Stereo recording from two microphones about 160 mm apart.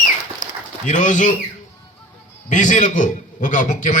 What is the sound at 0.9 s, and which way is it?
Speech, 50° left (ahead or behind).